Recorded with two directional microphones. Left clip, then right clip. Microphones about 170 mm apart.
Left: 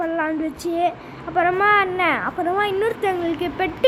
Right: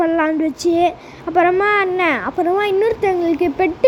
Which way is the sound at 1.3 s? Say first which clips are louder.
Right 3 dB; 50° right (ahead or behind).